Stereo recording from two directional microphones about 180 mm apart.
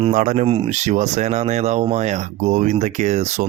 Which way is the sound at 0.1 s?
45° right (ahead or behind).